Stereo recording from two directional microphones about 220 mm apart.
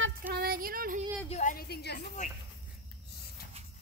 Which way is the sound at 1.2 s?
30° left (ahead or behind).